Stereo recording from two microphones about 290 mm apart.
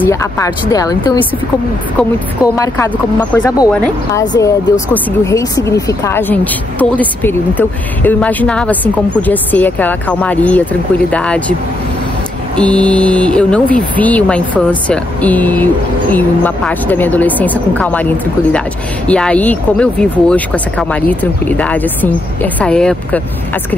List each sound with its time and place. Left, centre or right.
0.1 s speech: centre
12.5 s speech: centre